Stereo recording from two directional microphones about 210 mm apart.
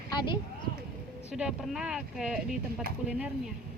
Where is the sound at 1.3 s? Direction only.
5° right (ahead or behind).